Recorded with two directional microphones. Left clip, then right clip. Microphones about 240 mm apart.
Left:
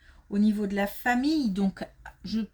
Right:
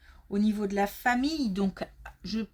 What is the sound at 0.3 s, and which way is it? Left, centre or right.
Speech, right.